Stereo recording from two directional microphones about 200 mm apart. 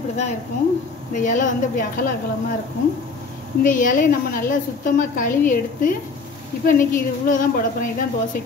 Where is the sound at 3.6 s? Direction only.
40° left (ahead or behind).